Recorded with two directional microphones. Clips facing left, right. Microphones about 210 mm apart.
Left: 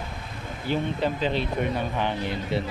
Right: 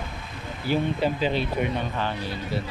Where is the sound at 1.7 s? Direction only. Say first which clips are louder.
Left 1 dB; 15° left (ahead or behind).